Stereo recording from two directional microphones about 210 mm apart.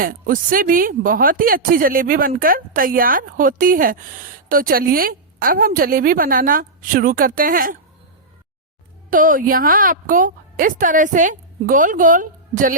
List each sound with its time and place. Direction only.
0.0 s a woman's voice: 40° right (ahead or behind)
9.0 s speech: 40° right (ahead or behind)